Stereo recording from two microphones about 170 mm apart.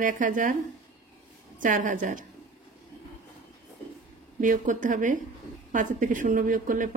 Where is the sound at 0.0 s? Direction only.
50° right (ahead or behind).